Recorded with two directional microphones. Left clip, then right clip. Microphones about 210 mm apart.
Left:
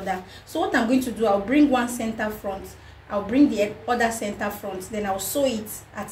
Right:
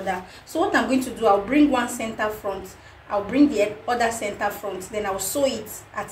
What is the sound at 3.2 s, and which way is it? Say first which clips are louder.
A woman's voice: even; 20° left (ahead or behind).